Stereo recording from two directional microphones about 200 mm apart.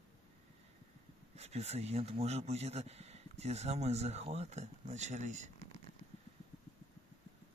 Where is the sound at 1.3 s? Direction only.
30° right (ahead or behind).